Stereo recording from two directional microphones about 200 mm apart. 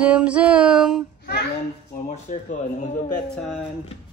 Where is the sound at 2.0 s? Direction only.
35° left (ahead or behind).